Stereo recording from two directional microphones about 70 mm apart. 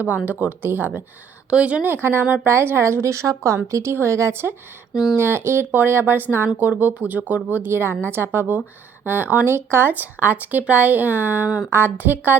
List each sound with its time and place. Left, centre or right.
0.3 s speech: right
1.5 s a woman's voice: centre
1.9 s a woman's voice: right